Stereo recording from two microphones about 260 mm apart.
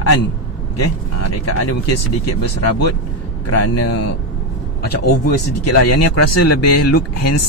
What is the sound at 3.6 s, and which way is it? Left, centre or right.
Speech, left.